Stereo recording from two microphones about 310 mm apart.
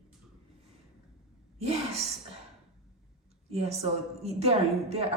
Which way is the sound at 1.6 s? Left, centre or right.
Centre.